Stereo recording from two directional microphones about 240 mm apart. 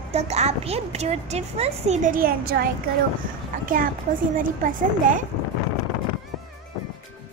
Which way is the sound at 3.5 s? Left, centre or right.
Right.